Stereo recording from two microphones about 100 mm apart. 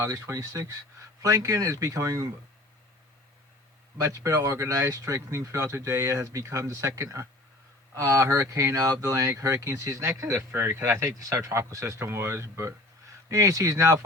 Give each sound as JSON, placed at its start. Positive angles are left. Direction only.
{"t": 0.0, "sound": "speech", "side_deg": -30}
{"t": 4.0, "sound": "speech", "side_deg": -35}